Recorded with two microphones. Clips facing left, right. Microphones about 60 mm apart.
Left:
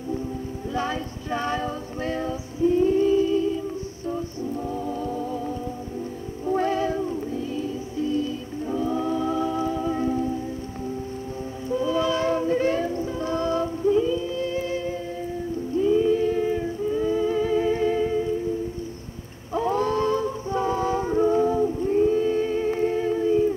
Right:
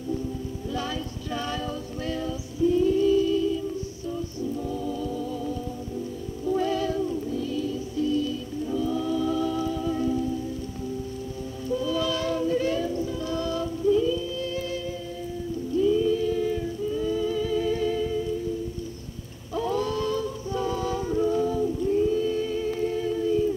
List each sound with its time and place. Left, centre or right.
0.7 s female singing: left
4.1 s a capella: left
6.4 s music: left
11.7 s music: left
19.5 s a sound: left